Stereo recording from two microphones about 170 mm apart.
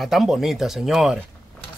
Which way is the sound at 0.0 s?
Centre (ahead or behind).